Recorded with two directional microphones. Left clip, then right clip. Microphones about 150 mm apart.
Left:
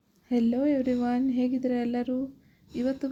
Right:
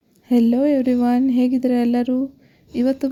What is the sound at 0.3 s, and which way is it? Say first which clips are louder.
Speech: right 9 dB; 40° right (ahead or behind).